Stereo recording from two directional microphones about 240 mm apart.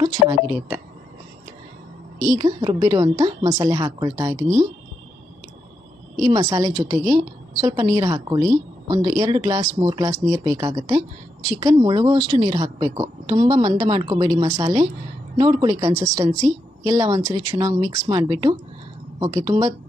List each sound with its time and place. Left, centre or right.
0.0 s a woman's voice: centre
2.1 s a woman's voice: centre
6.1 s a woman's voice: centre